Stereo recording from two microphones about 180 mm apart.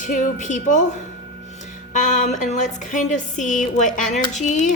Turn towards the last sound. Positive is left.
turn(degrees=40)  # may be behind; listen again after turning